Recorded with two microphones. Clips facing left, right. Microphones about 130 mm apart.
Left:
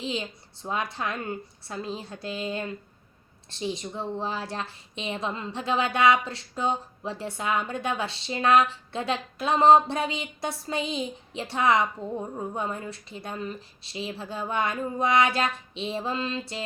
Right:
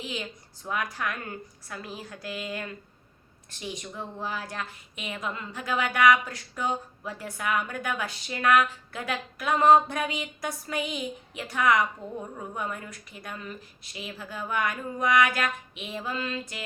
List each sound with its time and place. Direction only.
0.0 s a woman's voice: 25° left (ahead or behind)